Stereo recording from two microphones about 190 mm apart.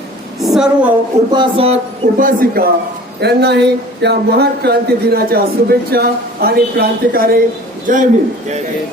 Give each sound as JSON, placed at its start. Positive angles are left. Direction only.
{"t": 0.4, "sound": "a woman's voice", "side_deg": 0}
{"t": 1.3, "sound": "speech", "side_deg": -25}
{"t": 2.1, "sound": "speech", "side_deg": -45}
{"t": 3.2, "sound": "speech", "side_deg": -60}